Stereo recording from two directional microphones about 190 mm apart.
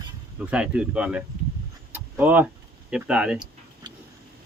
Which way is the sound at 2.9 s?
5° right (ahead or behind).